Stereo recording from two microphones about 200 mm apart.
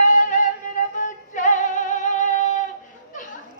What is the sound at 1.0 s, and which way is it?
Music, 40° left (ahead or behind).